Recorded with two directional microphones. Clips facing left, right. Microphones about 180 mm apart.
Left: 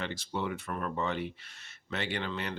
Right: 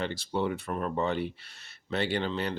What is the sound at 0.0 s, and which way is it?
Speech, 30° right (ahead or behind).